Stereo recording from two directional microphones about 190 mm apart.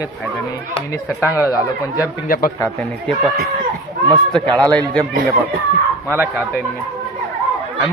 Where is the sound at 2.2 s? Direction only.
50° left (ahead or behind).